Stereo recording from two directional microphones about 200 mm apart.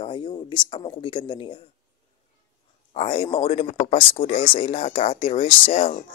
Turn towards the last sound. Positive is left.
turn(degrees=30)  # may be behind; listen again after turning